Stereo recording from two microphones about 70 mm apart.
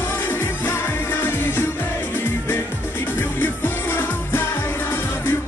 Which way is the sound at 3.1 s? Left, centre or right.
Left.